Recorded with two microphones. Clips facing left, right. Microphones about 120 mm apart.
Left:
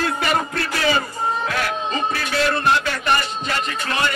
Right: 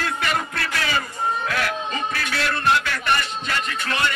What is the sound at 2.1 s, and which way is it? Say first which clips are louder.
Music: left 5 dB; 30° left (ahead or behind).